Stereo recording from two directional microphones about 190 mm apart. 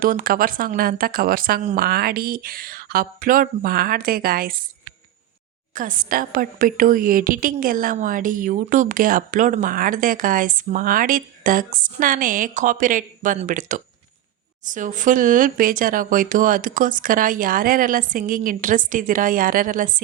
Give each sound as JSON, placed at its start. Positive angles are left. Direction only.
{"t": 0.0, "sound": "a woman's voice", "side_deg": -45}
{"t": 5.7, "sound": "a woman's voice", "side_deg": -45}